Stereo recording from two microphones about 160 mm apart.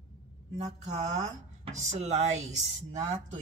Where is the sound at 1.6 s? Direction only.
45° right (ahead or behind).